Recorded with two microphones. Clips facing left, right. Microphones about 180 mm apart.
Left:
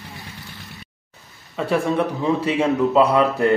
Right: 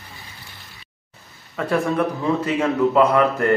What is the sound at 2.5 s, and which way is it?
A man's voice, 15° left (ahead or behind).